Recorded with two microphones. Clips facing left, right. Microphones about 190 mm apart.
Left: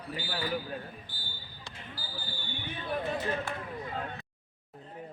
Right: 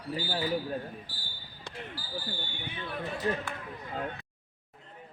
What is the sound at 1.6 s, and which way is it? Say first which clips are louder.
Basketball bounce: right 6 dB; 65° right (ahead or behind).